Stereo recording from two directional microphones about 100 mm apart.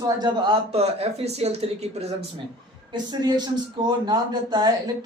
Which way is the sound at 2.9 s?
45° right (ahead or behind).